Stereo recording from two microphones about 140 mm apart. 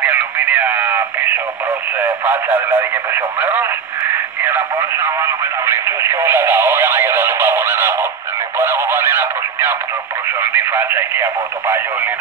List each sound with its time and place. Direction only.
0.0 s radio: 10° right (ahead or behind)
2.0 s speech: 15° right (ahead or behind)